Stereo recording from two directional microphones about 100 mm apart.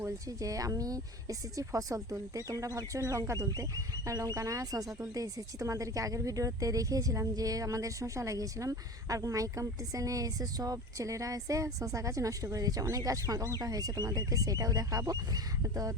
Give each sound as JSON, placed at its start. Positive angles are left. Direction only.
{"t": 0.0, "sound": "speech", "side_deg": -35}